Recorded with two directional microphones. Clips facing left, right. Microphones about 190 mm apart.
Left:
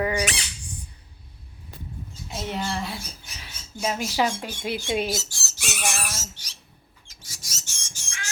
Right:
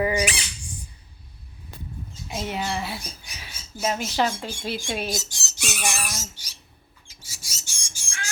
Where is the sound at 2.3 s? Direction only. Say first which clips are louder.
Right 1 dB; 5° right (ahead or behind).